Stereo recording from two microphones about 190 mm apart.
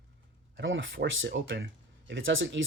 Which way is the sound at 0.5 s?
90° right.